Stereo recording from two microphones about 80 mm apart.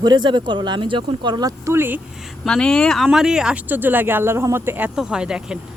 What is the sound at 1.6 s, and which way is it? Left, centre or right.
Speech, right.